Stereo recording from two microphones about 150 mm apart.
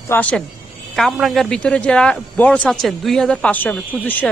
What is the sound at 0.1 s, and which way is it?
A man's voice, 10° left (ahead or behind).